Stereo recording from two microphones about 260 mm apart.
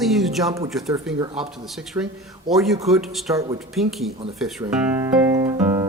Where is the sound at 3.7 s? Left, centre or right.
Centre.